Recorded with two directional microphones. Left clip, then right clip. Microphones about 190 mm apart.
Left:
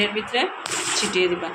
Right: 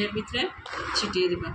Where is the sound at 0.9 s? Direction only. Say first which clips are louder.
Left 4 dB; 45° left (ahead or behind).